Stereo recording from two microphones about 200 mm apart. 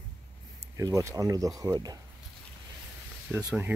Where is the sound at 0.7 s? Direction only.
15° right (ahead or behind).